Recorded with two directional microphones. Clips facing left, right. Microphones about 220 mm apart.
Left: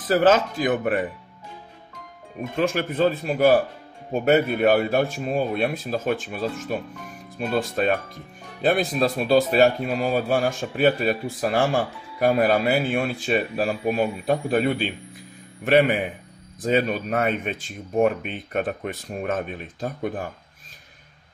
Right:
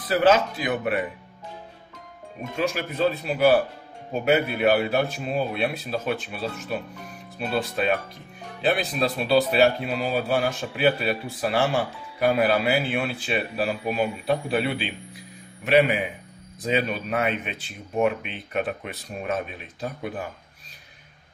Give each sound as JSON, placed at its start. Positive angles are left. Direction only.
{"t": 0.0, "sound": "speech", "side_deg": 45}
{"t": 2.5, "sound": "speech", "side_deg": 50}